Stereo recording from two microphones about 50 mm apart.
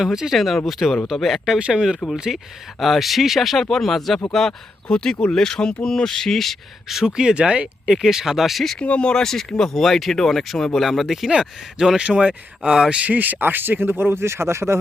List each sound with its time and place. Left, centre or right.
0.0 s speech: centre
0.3 s speech: centre
1.5 s speech: centre
7.2 s speech: centre
8.8 s speech: left
9.2 s speech: centre
12.0 s speech: right
13.1 s speech: right